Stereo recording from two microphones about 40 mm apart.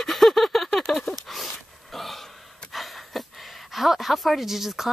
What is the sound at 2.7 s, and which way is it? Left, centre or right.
Speech, centre.